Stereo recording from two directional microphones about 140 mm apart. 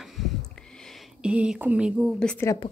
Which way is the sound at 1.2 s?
5° right (ahead or behind).